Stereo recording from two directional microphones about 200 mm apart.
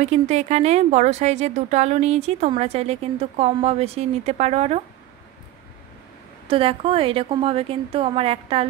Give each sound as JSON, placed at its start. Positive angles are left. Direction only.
{"t": 0.0, "sound": "speech", "side_deg": -35}
{"t": 6.4, "sound": "a woman's voice", "side_deg": -25}